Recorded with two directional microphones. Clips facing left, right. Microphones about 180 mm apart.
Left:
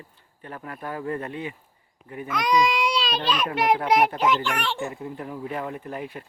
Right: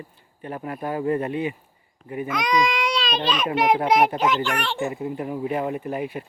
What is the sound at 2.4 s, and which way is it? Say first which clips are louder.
Baby cry: left 1 dB; 5° left (ahead or behind).